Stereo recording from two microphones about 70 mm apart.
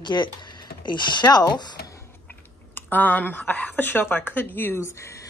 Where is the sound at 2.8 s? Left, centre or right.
Left.